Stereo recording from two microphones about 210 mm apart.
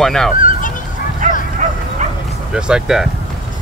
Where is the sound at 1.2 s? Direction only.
35° right (ahead or behind).